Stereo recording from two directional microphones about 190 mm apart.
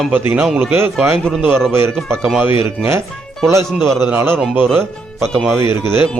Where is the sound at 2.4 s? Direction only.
10° right (ahead or behind).